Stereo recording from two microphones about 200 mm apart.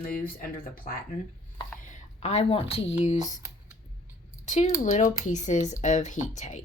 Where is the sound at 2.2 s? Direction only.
30° left (ahead or behind).